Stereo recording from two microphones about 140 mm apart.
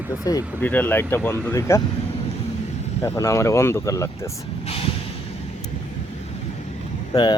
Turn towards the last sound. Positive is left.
turn(degrees=35)  # may be behind; listen again after turning